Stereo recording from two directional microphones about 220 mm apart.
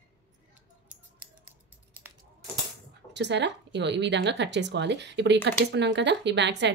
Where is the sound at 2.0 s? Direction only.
10° right (ahead or behind).